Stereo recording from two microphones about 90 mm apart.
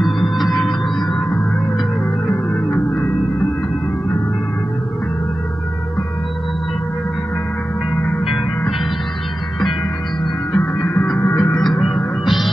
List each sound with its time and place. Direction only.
0.0 s music: centre (ahead or behind)
10.6 s music: 20° left (ahead or behind)
11.3 s music: 5° left (ahead or behind)